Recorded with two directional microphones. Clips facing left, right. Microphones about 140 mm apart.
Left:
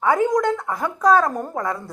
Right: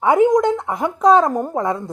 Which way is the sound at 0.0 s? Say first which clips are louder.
Right 5 dB; 20° right (ahead or behind).